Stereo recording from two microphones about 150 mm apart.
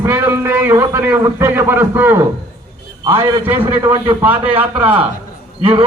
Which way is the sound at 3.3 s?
15° right (ahead or behind).